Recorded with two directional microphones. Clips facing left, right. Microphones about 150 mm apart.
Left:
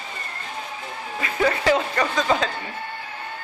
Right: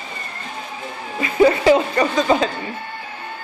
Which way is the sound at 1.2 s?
15° right (ahead or behind).